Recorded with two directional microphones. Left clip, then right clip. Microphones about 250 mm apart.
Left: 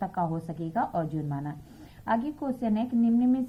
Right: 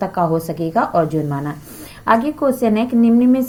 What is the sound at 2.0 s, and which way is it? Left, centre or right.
A woman's voice, centre.